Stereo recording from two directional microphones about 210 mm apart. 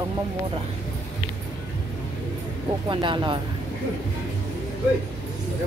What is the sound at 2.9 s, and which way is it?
Speech, 20° right (ahead or behind).